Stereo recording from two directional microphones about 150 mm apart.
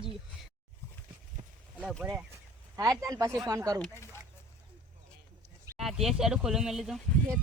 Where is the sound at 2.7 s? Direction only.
20° right (ahead or behind).